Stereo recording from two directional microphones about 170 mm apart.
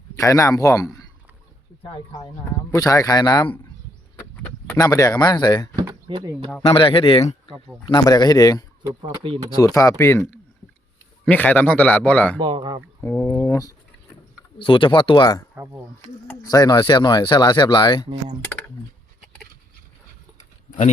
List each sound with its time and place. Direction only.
0.2 s speech: 20° left (ahead or behind)
2.7 s speech: 20° left (ahead or behind)
4.4 s speech: 15° left (ahead or behind)
5.7 s a sound: 15° right (ahead or behind)
6.1 s speech: 30° right (ahead or behind)
6.7 s speech: 30° left (ahead or behind)
7.9 s speech: 20° left (ahead or behind)
9.0 s speech: 30° right (ahead or behind)
9.6 s speech: 20° left (ahead or behind)
12.4 s speech: 30° right (ahead or behind)
13.0 s speech: 15° left (ahead or behind)
14.6 s speech: 30° left (ahead or behind)
15.5 s speech: 15° right (ahead or behind)
16.4 s speech: 20° left (ahead or behind)